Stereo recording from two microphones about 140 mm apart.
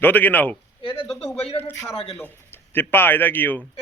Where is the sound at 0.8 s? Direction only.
40° left (ahead or behind).